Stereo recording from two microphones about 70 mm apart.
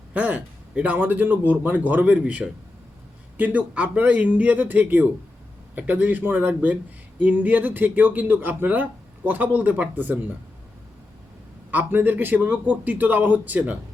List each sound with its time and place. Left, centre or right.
0.1 s speech: right
11.7 s speech: right